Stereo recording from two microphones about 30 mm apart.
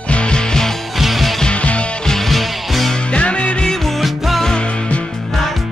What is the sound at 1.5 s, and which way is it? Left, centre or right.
Music, left.